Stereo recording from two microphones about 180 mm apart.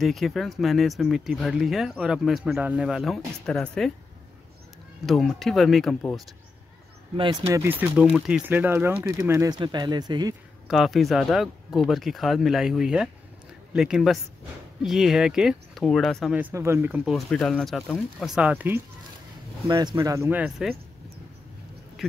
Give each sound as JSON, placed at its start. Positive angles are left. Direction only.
{"t": 0.0, "sound": "speech", "side_deg": 0}
{"t": 5.0, "sound": "speech", "side_deg": 0}
{"t": 7.2, "sound": "speech", "side_deg": -25}
{"t": 7.6, "sound": "speech", "side_deg": -10}
{"t": 10.7, "sound": "speech", "side_deg": 0}
{"t": 17.0, "sound": "speech", "side_deg": 0}
{"t": 19.7, "sound": "speech", "side_deg": -25}